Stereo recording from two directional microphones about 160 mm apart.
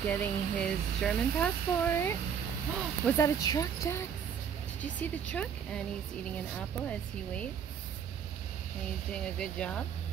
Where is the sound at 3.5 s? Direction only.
20° left (ahead or behind).